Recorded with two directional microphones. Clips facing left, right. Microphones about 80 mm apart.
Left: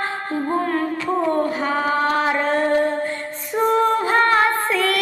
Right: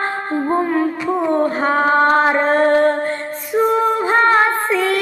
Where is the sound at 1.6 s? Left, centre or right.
Right.